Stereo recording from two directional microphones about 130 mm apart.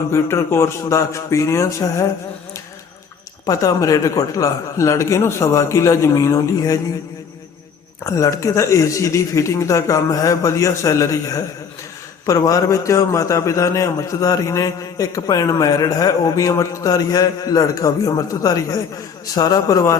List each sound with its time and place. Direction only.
0.1 s a man's voice: 20° left (ahead or behind)
3.4 s a man's voice: 25° left (ahead or behind)
8.0 s a man's voice: 25° left (ahead or behind)